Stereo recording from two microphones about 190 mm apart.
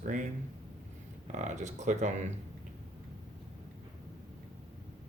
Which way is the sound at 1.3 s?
40° right (ahead or behind).